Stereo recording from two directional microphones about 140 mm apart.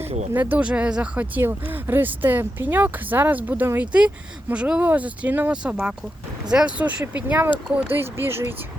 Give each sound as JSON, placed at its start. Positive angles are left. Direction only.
{"t": 0.3, "sound": "speech", "side_deg": -15}